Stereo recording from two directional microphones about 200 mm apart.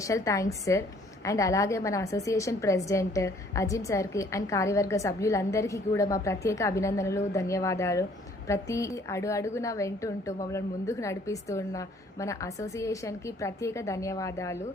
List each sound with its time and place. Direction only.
0.1 s a woman's voice: 15° left (ahead or behind)